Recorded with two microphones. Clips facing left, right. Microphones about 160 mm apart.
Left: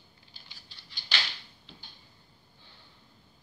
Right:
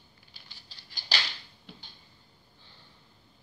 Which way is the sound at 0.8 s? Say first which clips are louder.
Right 5 dB; 45° right (ahead or behind).